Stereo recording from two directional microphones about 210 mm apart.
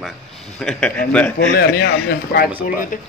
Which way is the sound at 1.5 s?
50° left (ahead or behind).